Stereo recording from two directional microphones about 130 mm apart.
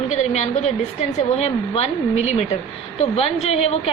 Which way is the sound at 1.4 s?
50° left (ahead or behind).